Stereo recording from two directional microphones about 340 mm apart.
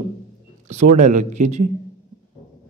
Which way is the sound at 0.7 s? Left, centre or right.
Right.